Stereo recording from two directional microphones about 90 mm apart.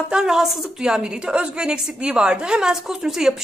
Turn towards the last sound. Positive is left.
turn(degrees=-5)  # may be behind; listen again after turning